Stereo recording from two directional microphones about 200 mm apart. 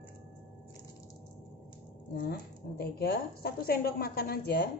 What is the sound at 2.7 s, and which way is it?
A woman's voice, 50° left (ahead or behind).